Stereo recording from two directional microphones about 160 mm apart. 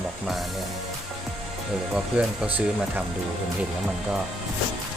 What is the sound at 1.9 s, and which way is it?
Speech, 10° right (ahead or behind).